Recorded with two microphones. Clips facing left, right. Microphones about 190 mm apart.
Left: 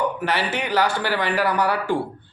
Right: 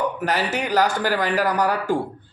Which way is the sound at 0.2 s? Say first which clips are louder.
Right 1 dB; 40° right (ahead or behind).